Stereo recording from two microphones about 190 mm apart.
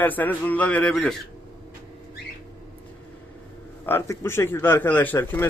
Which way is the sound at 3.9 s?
15° left (ahead or behind).